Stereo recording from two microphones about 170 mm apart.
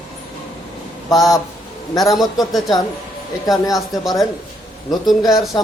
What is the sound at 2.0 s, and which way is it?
Speech, centre (ahead or behind).